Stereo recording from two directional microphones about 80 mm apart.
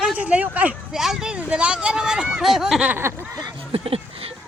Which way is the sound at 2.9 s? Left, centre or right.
Right.